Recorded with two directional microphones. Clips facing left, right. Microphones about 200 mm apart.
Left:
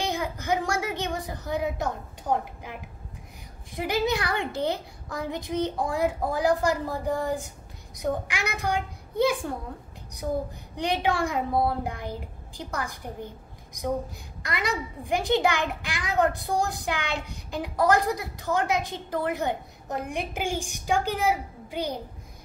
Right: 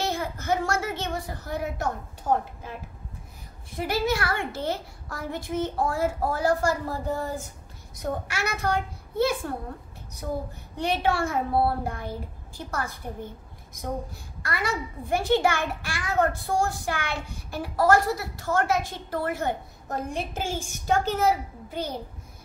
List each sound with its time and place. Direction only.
0.0 s a sound: 15° left (ahead or behind)
3.7 s a child's voice: 15° left (ahead or behind)
10.8 s a child's voice: 15° left (ahead or behind)
14.4 s a child's voice: 15° left (ahead or behind)